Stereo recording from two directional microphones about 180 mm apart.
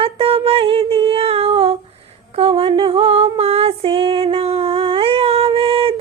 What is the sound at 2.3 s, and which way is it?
Female singing, 35° right (ahead or behind).